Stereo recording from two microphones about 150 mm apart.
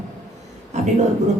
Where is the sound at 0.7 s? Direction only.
50° right (ahead or behind).